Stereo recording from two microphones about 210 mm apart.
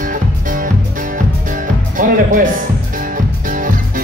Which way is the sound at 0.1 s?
40° right (ahead or behind).